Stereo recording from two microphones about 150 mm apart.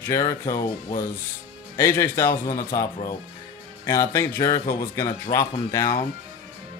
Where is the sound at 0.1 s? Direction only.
20° left (ahead or behind).